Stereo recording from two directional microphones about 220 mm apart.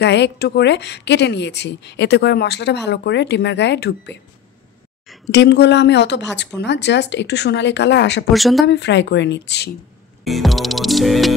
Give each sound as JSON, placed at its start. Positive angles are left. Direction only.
{"t": 0.0, "sound": "speech", "side_deg": 50}
{"t": 5.3, "sound": "speech", "side_deg": 50}
{"t": 8.3, "sound": "music", "side_deg": 0}
{"t": 8.6, "sound": "speech", "side_deg": 50}
{"t": 10.2, "sound": "music", "side_deg": 0}